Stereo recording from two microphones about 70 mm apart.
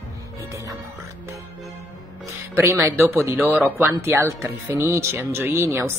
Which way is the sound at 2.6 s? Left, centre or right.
Right.